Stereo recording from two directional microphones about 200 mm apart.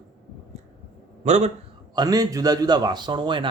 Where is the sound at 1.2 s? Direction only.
35° right (ahead or behind).